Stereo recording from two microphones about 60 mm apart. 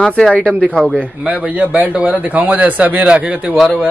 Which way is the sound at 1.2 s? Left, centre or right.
Right.